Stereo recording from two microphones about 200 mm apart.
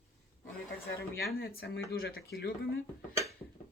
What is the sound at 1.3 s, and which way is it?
Speech, 50° left (ahead or behind).